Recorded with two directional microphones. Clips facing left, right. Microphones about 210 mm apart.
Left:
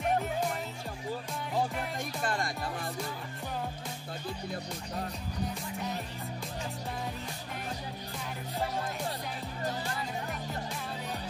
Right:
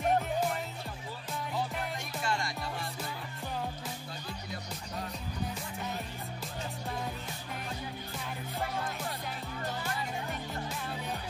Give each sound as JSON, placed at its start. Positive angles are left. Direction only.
{"t": 2.2, "sound": "music", "side_deg": 50}